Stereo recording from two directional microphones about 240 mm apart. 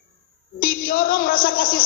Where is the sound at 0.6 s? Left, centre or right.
Left.